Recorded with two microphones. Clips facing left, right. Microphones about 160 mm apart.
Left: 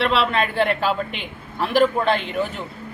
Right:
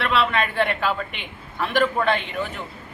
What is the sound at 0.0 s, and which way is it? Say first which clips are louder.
Speech: left 2 dB; 30° left (ahead or behind).